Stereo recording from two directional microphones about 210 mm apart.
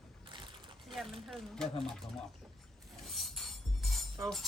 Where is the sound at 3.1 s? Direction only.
Centre (ahead or behind).